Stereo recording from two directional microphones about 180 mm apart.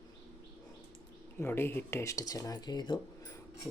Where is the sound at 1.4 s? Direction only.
15° left (ahead or behind).